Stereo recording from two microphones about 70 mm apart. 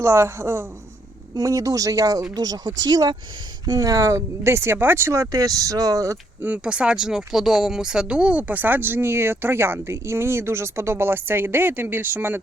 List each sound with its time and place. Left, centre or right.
0.0 s a woman's voice: right
1.4 s speech: right
2.3 s speech: right
3.7 s speech: right
6.4 s speech: centre